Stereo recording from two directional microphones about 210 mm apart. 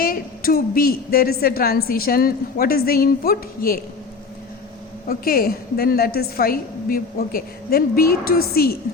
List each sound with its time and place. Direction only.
0.0 s a woman's voice: 45° left (ahead or behind)
5.0 s a woman's voice: 45° left (ahead or behind)